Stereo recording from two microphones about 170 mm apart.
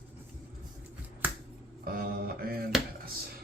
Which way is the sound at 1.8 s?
60° right (ahead or behind).